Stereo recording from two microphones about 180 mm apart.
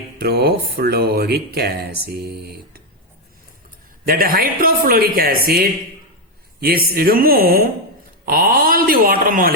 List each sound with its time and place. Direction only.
0.2 s speech: 60° right (ahead or behind)
4.0 s a man's voice: 55° right (ahead or behind)